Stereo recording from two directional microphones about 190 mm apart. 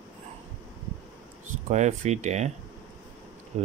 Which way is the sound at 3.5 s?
35° right (ahead or behind).